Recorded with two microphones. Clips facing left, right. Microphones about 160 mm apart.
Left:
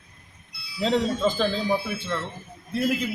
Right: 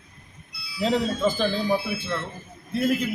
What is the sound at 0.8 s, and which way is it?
Wind chime, 5° right (ahead or behind).